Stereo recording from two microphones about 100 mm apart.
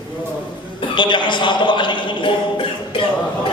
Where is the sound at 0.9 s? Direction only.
50° left (ahead or behind).